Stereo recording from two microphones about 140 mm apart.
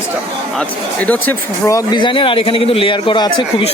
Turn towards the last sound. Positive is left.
turn(degrees=35)  # may be behind; listen again after turning